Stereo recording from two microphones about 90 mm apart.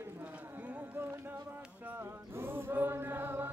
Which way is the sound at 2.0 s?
25° right (ahead or behind).